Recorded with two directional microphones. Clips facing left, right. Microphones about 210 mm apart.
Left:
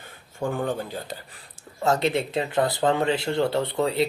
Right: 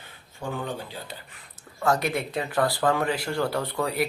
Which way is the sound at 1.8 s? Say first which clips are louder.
Left 2 dB; 25° left (ahead or behind).